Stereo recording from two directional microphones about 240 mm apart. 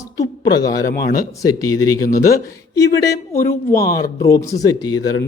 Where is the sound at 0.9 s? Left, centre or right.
Left.